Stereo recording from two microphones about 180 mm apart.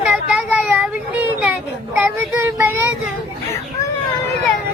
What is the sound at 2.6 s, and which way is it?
Child singing, 15° right (ahead or behind).